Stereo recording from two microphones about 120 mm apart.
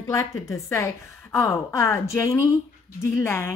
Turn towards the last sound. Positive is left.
turn(degrees=20)  # may be behind; listen again after turning